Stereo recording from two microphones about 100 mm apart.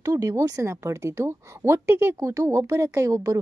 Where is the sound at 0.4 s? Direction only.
30° right (ahead or behind).